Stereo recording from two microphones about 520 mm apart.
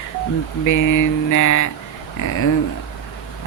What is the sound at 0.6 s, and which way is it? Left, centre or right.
Speech, left.